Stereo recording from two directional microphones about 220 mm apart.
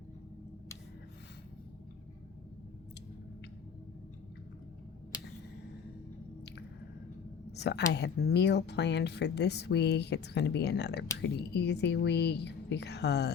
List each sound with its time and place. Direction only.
7.5 s speech: 50° left (ahead or behind)